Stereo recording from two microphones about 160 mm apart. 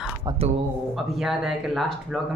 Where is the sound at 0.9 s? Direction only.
Centre (ahead or behind).